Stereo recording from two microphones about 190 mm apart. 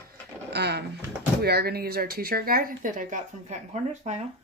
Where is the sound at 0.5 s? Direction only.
60° right (ahead or behind); by 4.2 s 35° right (ahead or behind).